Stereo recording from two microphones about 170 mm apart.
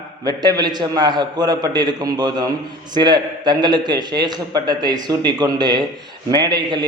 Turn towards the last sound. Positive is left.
turn(degrees=-25)  # may be behind; listen again after turning